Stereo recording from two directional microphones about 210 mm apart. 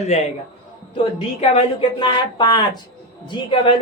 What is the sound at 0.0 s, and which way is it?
Speech, 30° left (ahead or behind).